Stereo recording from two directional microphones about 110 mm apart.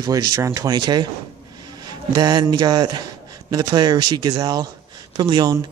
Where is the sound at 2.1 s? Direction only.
40° right (ahead or behind).